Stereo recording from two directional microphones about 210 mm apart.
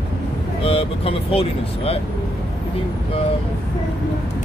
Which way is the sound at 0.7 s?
25° left (ahead or behind).